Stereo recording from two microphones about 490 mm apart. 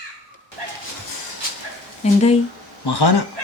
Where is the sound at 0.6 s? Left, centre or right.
Right.